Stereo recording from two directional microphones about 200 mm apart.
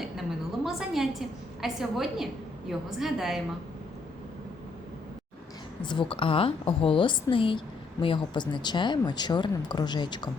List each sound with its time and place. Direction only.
0.0 s a sound: centre (ahead or behind)
1.6 s a woman's voice: centre (ahead or behind)
5.8 s speech: 25° left (ahead or behind)